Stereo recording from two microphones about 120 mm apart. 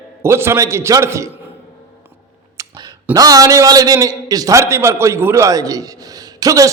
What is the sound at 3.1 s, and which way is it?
A man's voice, 30° right (ahead or behind).